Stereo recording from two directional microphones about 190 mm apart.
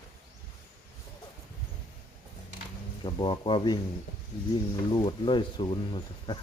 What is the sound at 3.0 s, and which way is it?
Speech, 25° left (ahead or behind).